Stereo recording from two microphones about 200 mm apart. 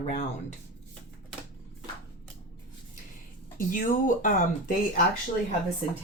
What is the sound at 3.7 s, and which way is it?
Speech, 40° left (ahead or behind).